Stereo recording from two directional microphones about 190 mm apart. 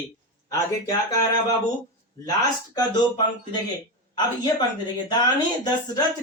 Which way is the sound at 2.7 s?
20° left (ahead or behind).